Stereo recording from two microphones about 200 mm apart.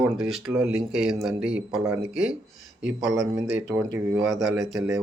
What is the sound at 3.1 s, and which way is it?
Speech, 15° right (ahead or behind).